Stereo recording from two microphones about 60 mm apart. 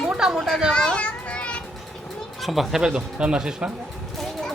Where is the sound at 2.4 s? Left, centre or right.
Centre.